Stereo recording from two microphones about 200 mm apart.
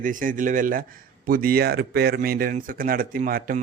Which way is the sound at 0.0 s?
40° right (ahead or behind).